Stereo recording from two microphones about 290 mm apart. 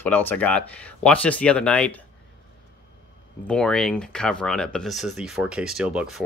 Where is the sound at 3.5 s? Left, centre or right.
Centre.